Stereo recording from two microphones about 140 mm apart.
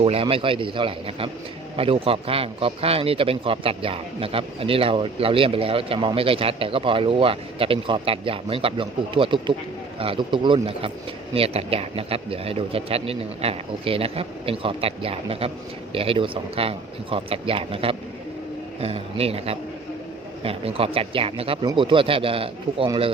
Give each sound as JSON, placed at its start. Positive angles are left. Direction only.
{"t": 0.0, "sound": "a man's voice", "side_deg": -40}